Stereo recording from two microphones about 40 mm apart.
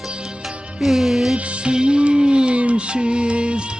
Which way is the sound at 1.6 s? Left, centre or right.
Right.